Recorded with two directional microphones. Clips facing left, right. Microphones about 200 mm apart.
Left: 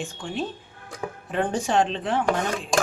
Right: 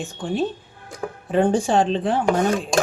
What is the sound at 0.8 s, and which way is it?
Music, 30° right (ahead or behind).